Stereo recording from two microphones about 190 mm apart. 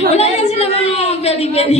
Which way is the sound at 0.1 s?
35° left (ahead or behind).